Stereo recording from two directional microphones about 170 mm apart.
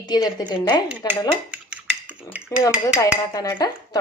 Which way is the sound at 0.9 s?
10° right (ahead or behind).